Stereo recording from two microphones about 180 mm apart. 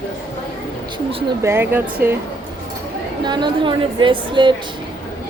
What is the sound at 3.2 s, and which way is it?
A woman's voice, 25° right (ahead or behind).